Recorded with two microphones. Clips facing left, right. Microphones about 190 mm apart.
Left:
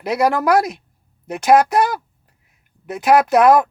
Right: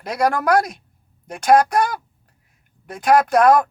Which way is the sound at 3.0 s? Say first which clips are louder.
Left 2 dB; 5° left (ahead or behind).